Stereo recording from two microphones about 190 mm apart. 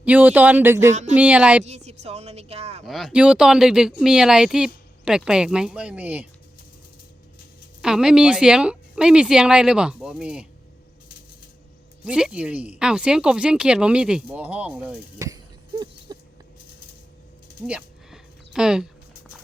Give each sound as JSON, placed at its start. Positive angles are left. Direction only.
{"t": 0.0, "sound": "speech", "side_deg": -10}
{"t": 1.6, "sound": "speech", "side_deg": -35}
{"t": 2.8, "sound": "speech", "side_deg": 0}
{"t": 7.8, "sound": "speech", "side_deg": -5}
{"t": 12.0, "sound": "speech", "side_deg": -5}
{"t": 16.1, "sound": "rodents", "side_deg": -20}
{"t": 17.7, "sound": "a sound", "side_deg": -5}